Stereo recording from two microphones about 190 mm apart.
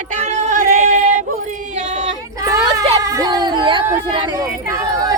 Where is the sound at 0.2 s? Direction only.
35° right (ahead or behind).